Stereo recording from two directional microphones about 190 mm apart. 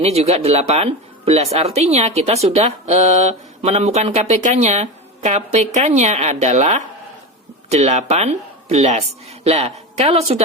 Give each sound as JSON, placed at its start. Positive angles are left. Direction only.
{"t": 0.0, "sound": "a woman's voice", "side_deg": -35}